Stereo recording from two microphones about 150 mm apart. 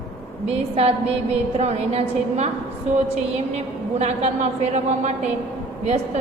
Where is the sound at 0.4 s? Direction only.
45° right (ahead or behind).